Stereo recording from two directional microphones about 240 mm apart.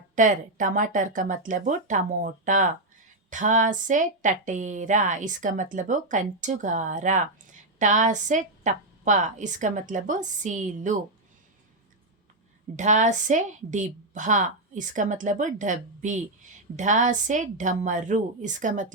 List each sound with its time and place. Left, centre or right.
0.2 s a woman's voice: right
12.7 s a woman's voice: right